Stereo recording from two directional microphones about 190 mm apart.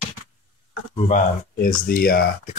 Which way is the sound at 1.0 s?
45° left (ahead or behind).